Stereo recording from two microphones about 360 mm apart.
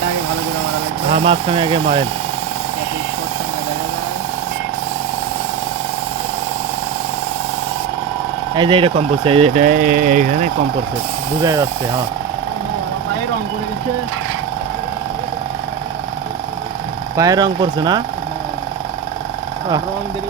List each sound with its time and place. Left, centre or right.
1.1 s speech: centre
8.5 s speech: centre
11.4 s speech: centre
17.2 s speech: centre